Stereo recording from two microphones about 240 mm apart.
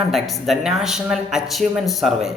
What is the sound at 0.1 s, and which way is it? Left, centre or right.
Speech, centre.